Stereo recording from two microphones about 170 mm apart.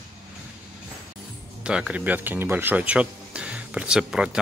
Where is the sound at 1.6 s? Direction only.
5° right (ahead or behind).